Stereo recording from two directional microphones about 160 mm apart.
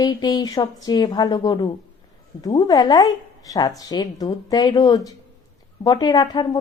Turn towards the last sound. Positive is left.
turn(degrees=25)  # may be behind; listen again after turning